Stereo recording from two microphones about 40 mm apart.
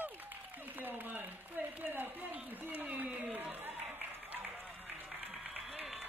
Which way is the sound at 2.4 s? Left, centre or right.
Right.